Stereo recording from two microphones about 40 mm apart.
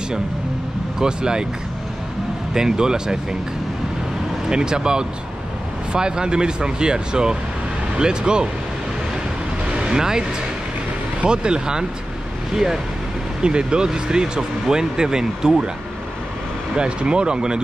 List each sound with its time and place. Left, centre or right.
0.9 s speech: centre
2.5 s speech: centre
4.5 s speech: centre
9.7 s a sound: centre
11.2 s speech: right
13.4 s speech: right
16.7 s speech: right